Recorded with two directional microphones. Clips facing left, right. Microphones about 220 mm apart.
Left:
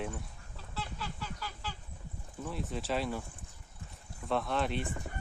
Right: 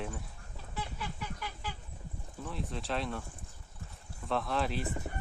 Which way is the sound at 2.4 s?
Centre (ahead or behind).